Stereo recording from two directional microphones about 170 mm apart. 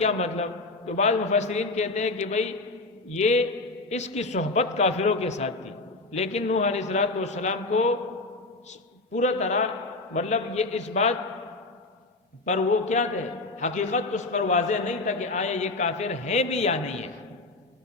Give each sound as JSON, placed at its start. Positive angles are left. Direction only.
{"t": 0.0, "sound": "a man's voice", "side_deg": 40}
{"t": 9.1, "sound": "a man's voice", "side_deg": 45}
{"t": 12.5, "sound": "a man's voice", "side_deg": 45}